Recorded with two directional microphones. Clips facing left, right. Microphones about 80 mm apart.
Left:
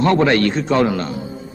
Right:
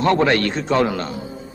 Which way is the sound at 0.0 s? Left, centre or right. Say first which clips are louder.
Left 2 dB; centre.